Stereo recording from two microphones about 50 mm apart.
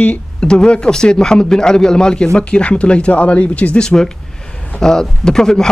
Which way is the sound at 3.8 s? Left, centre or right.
Centre.